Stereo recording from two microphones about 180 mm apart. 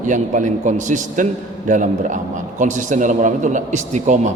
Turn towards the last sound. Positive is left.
turn(degrees=-40)  # may be behind; listen again after turning